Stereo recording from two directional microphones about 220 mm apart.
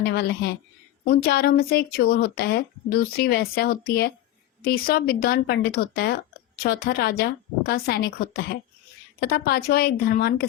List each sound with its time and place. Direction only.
0.0 s speech: 45° left (ahead or behind)